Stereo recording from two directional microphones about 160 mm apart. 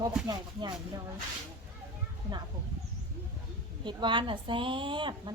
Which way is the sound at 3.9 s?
30° right (ahead or behind).